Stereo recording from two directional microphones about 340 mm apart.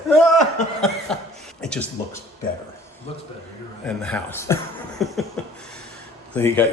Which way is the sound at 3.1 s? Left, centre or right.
Centre.